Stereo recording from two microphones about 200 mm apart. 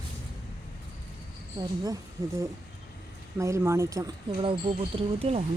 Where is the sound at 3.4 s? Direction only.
15° right (ahead or behind).